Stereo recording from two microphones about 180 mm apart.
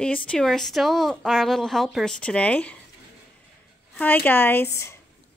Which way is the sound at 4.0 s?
10° left (ahead or behind).